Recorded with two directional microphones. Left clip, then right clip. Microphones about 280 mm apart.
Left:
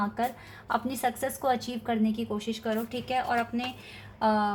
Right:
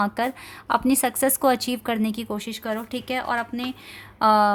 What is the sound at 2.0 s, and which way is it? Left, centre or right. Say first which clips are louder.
Speech: right 2 dB; right.